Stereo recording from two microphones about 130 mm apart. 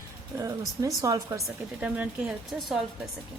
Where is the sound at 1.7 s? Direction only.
10° right (ahead or behind).